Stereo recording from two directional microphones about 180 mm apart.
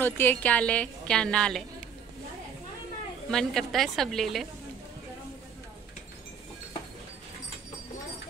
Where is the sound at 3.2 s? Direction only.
5° left (ahead or behind).